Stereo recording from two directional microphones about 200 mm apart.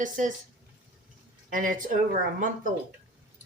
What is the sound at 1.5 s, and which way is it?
Speech, 40° right (ahead or behind).